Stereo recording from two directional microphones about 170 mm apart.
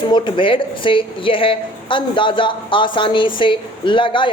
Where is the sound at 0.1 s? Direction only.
30° left (ahead or behind).